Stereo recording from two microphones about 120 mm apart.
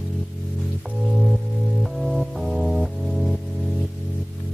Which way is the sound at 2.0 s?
Centre (ahead or behind).